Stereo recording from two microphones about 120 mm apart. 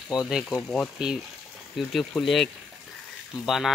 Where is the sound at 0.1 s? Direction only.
5° right (ahead or behind).